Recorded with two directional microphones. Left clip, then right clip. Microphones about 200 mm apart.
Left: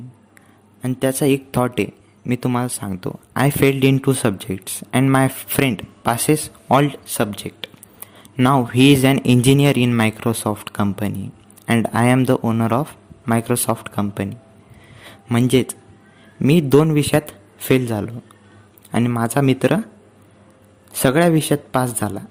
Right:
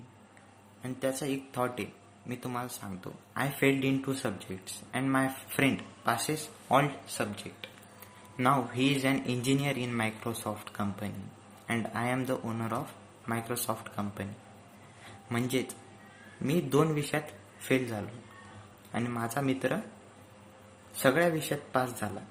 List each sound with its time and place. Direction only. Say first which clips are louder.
0.8 s speech: left 13 dB; 50° left (ahead or behind)
15.3 s speech: left 15 dB; 45° left (ahead or behind)
21.0 s speech: left 11 dB; 50° left (ahead or behind)